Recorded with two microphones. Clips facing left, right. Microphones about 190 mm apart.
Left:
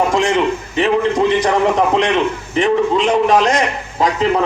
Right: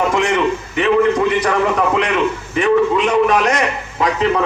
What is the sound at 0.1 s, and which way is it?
Speech, 30° left (ahead or behind).